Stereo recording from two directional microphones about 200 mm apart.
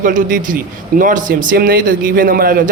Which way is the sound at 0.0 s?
40° right (ahead or behind).